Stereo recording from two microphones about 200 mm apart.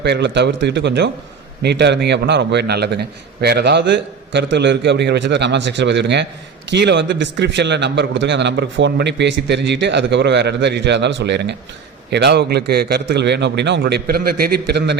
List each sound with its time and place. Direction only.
0.0 s a man's voice: 60° right (ahead or behind)